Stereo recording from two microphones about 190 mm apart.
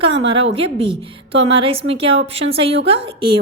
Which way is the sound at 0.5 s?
30° right (ahead or behind).